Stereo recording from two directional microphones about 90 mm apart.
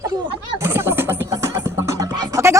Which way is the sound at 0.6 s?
25° right (ahead or behind).